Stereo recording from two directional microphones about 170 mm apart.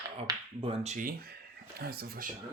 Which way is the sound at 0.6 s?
35° right (ahead or behind).